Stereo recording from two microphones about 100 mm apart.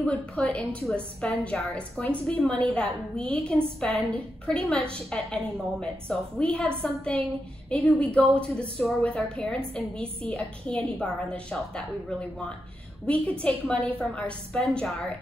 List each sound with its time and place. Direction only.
0.0 s a woman's voice: 15° left (ahead or behind)